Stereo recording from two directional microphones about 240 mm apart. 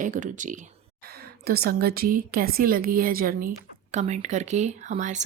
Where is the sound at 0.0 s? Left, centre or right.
Right.